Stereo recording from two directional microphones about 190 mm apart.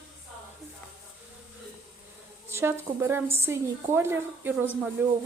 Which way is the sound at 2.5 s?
15° right (ahead or behind).